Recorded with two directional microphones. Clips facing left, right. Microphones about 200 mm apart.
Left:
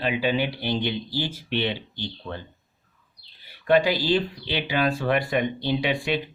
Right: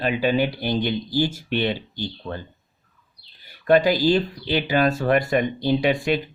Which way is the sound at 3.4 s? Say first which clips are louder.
Right 3 dB; 45° right (ahead or behind).